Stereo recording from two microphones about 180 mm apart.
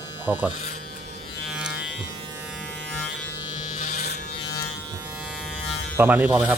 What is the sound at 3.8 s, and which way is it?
Electric shaver, 45° left (ahead or behind).